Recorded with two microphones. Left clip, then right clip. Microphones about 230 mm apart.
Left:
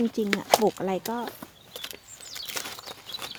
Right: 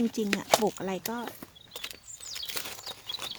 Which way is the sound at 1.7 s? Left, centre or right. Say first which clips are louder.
Left 1 dB; centre.